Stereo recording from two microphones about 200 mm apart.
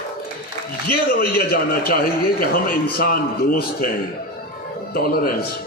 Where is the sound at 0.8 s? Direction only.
50° left (ahead or behind).